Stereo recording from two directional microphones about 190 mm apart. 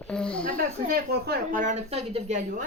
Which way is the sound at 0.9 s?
55° right (ahead or behind).